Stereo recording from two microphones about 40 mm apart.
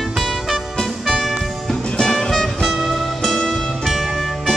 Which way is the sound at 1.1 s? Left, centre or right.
Centre.